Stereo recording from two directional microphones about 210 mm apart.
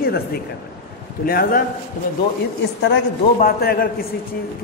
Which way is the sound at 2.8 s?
50° left (ahead or behind).